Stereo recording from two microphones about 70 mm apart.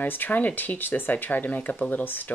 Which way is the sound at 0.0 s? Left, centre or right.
Left.